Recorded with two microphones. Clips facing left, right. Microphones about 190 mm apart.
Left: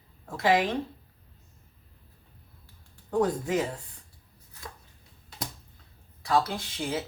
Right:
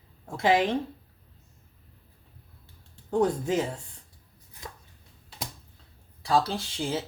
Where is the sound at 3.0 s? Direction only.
25° right (ahead or behind).